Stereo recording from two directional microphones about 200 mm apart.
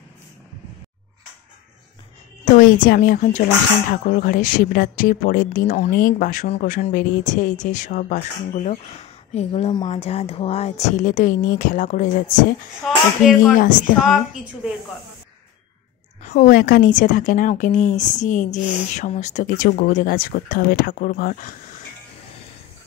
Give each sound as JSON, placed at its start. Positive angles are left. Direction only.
{"t": 2.5, "sound": "a woman's voice", "side_deg": 45}
{"t": 12.8, "sound": "a woman's voice", "side_deg": 0}
{"t": 16.2, "sound": "speech", "side_deg": 40}